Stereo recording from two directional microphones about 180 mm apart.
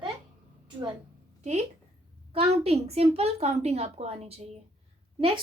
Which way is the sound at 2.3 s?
35° right (ahead or behind).